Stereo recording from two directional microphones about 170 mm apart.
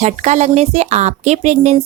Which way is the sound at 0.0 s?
45° right (ahead or behind).